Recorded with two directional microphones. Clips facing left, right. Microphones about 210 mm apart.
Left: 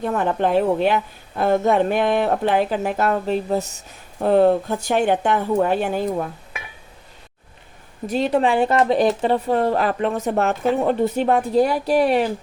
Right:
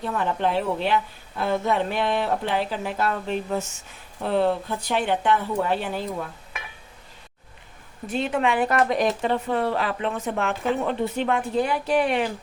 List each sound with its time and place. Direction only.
0.0 s speech: 50° left (ahead or behind)
8.0 s speech: 40° left (ahead or behind)